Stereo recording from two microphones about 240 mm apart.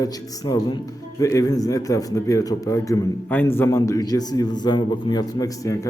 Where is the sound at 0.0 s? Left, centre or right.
Centre.